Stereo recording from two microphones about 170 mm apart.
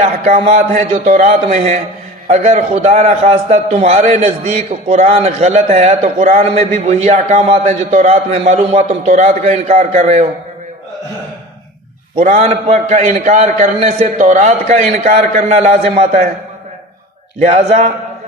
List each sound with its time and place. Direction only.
0.0 s a man's voice: 40° right (ahead or behind)
12.2 s a man's voice: 45° right (ahead or behind)
17.4 s a man's voice: 45° right (ahead or behind)